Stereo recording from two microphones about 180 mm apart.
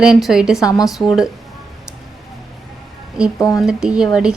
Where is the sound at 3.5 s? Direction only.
5° right (ahead or behind).